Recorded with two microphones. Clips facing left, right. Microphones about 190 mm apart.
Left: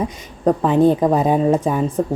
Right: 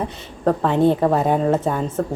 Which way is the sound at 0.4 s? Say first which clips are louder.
Left 3 dB; 15° left (ahead or behind).